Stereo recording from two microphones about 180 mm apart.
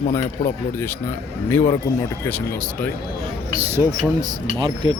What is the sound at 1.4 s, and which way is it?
Speech, 15° left (ahead or behind).